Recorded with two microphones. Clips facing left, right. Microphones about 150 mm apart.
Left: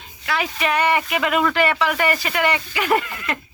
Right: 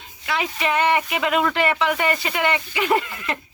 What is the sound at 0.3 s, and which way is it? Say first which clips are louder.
Speech: left 1 dB; 20° right (ahead or behind).